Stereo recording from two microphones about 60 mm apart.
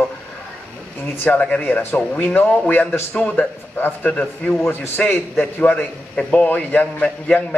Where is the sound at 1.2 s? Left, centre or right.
Left.